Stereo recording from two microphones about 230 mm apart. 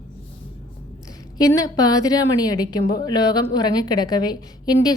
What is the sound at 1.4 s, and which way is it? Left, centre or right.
A woman's voice, centre.